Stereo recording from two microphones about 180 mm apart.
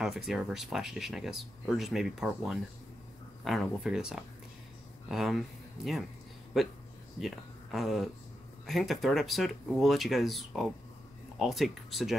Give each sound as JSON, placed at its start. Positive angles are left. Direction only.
{"t": 0.0, "sound": "speech", "side_deg": 0}
{"t": 7.2, "sound": "speech", "side_deg": 0}